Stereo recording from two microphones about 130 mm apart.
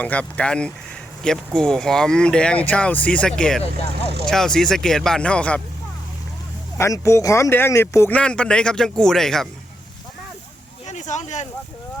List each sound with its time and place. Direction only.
0.0 s speech: 10° left (ahead or behind)
6.7 s speech: 25° left (ahead or behind)
8.2 s speech: 5° left (ahead or behind)
10.8 s a sound: 65° left (ahead or behind)